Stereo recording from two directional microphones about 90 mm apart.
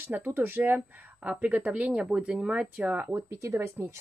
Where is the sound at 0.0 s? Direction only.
20° right (ahead or behind).